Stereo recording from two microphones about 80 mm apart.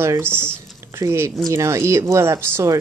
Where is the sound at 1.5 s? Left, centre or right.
Right.